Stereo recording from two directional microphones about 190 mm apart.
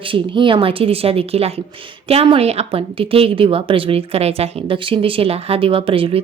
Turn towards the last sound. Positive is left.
turn(degrees=-30)  # may be behind; listen again after turning